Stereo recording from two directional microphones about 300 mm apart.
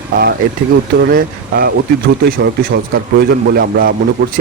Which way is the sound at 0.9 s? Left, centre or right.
Right.